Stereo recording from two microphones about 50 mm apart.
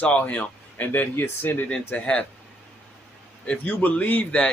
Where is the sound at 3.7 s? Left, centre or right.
Left.